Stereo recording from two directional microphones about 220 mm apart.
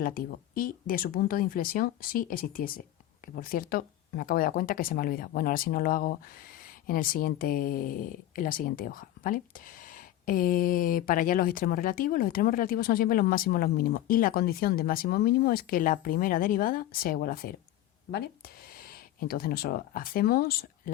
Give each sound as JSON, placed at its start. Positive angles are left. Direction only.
{"t": 0.0, "sound": "speech", "side_deg": 40}